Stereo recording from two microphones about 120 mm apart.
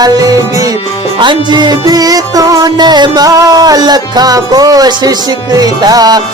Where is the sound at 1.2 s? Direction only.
40° right (ahead or behind).